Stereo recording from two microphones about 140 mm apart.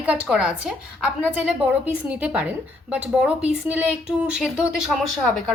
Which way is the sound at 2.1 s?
10° right (ahead or behind).